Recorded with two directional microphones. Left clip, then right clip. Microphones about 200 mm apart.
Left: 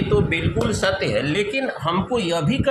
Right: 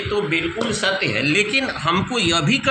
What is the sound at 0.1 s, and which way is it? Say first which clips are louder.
A man's voice: even; 35° left (ahead or behind).